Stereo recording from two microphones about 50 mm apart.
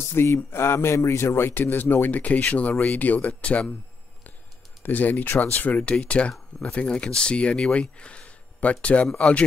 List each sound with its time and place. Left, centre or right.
0.2 s a sound: left
0.5 s a man's voice: left
1.5 s speech: left
4.8 s speech: left